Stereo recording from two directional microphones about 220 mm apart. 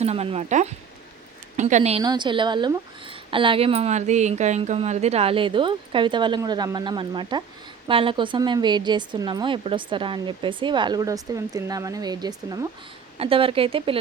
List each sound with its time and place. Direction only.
0.0 s a woman's voice: 30° right (ahead or behind)